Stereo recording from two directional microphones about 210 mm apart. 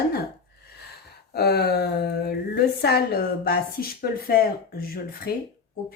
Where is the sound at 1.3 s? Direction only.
50° left (ahead or behind).